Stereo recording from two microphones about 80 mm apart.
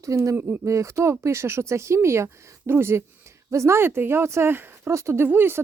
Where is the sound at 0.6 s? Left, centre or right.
Right.